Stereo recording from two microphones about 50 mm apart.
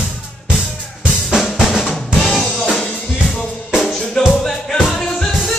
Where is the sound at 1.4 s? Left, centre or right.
Centre.